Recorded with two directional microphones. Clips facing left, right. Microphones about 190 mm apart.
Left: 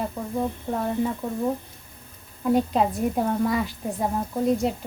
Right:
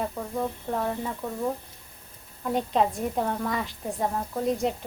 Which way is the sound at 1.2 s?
15° left (ahead or behind).